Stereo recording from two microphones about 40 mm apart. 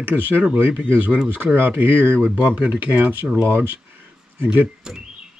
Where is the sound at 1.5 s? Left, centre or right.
Right.